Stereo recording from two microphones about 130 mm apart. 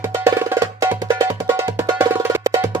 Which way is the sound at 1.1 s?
20° right (ahead or behind).